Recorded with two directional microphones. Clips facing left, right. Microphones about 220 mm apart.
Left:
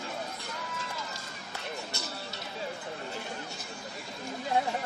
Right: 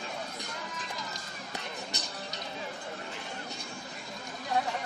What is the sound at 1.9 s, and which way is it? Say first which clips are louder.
Music: left 1 dB; 15° right (ahead or behind).